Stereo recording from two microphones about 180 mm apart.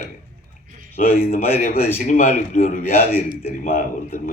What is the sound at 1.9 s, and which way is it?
Speech, 40° left (ahead or behind).